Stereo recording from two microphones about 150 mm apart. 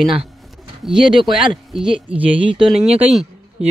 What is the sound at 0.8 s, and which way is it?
Speech, 5° right (ahead or behind).